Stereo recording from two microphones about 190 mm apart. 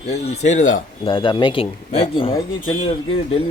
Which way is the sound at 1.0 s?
25° left (ahead or behind).